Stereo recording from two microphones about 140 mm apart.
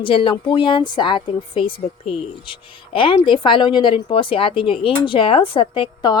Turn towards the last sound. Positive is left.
turn(degrees=35)  # may be behind; listen again after turning